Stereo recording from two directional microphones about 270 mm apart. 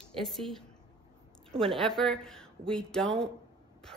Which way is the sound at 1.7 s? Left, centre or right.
Centre.